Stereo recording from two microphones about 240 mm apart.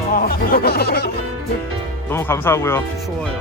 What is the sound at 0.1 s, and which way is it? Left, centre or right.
Speech, left.